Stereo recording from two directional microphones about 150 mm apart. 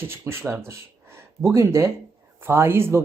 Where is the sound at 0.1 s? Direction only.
15° right (ahead or behind).